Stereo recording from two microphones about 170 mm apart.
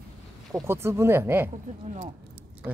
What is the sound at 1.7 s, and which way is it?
Speech, 45° right (ahead or behind).